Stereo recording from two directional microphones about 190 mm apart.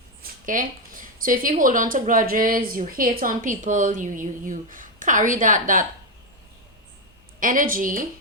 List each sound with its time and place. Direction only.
0.2 s a woman's voice: 45° right (ahead or behind)
7.3 s a woman's voice: 45° right (ahead or behind)